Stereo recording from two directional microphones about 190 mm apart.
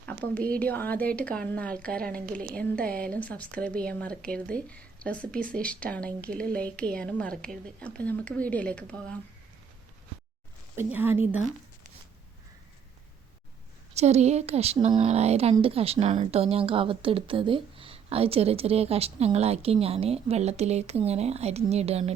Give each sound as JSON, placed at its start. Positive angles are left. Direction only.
{"t": 0.0, "sound": "speech", "side_deg": 5}
{"t": 10.8, "sound": "a woman's voice", "side_deg": -10}
{"t": 13.9, "sound": "speech", "side_deg": -35}